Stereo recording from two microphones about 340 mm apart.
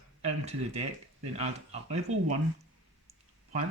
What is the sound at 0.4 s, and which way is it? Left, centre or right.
Speech, centre.